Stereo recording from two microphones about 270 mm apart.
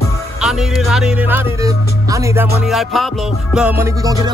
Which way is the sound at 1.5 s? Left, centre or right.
Centre.